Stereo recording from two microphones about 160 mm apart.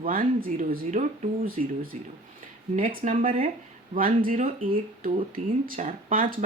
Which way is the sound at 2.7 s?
60° right (ahead or behind).